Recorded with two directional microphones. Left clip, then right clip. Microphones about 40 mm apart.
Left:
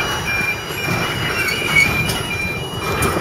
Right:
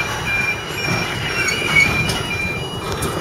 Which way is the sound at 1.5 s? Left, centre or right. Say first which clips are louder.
Even; centre.